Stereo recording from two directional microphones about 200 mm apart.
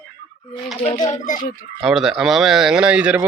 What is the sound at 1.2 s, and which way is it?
Speech, 40° left (ahead or behind).